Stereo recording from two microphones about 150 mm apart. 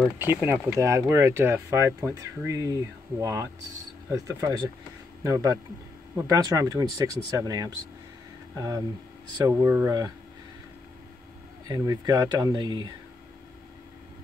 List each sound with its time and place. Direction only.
0.2 s speech: 15° right (ahead or behind)
11.6 s speech: 25° right (ahead or behind)